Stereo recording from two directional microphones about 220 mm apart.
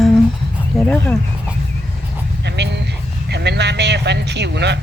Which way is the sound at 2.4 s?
50° right (ahead or behind).